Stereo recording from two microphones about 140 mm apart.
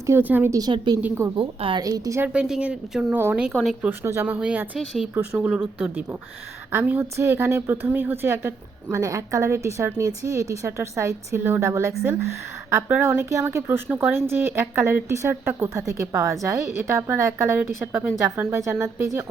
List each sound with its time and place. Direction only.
0.0 s speech: 15° right (ahead or behind)
0.6 s a woman's voice: 30° right (ahead or behind)
1.0 s speech: 15° right (ahead or behind)
1.4 s a woman's voice: 40° right (ahead or behind)
1.8 s a woman's voice: 25° right (ahead or behind)
2.3 s speech: 5° right (ahead or behind)
3.5 s speech: centre (ahead or behind)
3.8 s a woman's voice: 20° right (ahead or behind)